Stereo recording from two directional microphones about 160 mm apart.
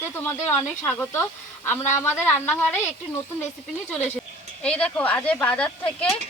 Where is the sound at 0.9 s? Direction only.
15° left (ahead or behind).